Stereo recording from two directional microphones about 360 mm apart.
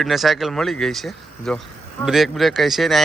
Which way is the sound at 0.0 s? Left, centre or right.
Centre.